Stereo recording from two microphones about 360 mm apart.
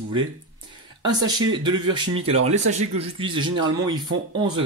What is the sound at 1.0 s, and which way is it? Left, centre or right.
Speech, centre.